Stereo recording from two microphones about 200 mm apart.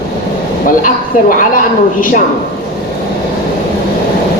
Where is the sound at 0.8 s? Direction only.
45° left (ahead or behind).